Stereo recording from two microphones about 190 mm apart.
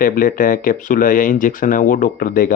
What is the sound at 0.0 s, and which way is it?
Speech, 50° left (ahead or behind).